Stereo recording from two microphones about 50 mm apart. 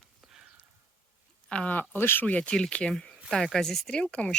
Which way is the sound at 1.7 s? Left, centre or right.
Left.